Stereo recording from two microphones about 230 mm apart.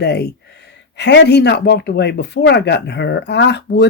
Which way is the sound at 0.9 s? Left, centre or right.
Left.